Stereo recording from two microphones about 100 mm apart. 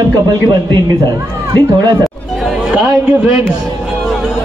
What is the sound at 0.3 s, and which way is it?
A man's voice, 50° right (ahead or behind).